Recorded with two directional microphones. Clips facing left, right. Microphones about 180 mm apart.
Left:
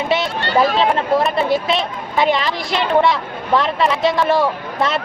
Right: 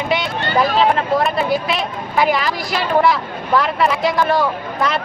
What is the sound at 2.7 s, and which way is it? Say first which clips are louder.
Speech: even; 25° left (ahead or behind).